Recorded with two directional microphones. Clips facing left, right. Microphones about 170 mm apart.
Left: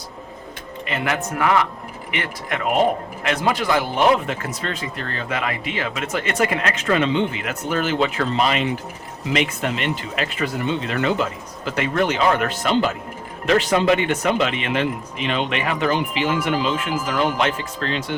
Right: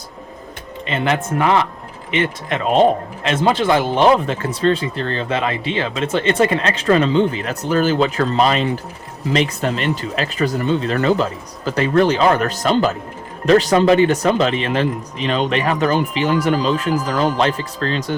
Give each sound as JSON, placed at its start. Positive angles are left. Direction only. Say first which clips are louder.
{"t": 0.9, "sound": "speech", "louder": "right 5 dB", "side_deg": -25}